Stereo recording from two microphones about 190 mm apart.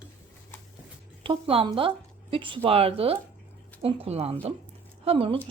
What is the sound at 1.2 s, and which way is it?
Speech, 30° right (ahead or behind).